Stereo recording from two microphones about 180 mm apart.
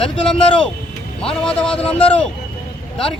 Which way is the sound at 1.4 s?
5° left (ahead or behind).